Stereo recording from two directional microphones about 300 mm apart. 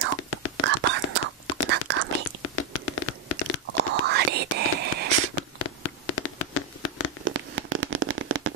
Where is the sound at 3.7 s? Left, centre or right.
Right.